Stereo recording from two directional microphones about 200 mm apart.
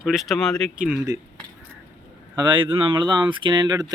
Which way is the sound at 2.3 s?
20° right (ahead or behind).